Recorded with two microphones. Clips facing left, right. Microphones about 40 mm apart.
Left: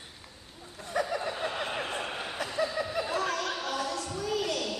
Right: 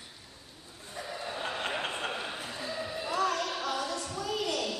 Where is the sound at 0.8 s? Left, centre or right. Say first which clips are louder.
Left 9 dB; left.